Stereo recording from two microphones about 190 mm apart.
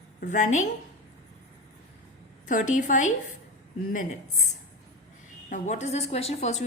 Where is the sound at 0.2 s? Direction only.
40° left (ahead or behind).